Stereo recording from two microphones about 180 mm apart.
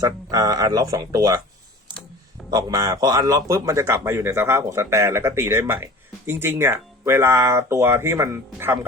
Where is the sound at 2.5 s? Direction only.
20° right (ahead or behind).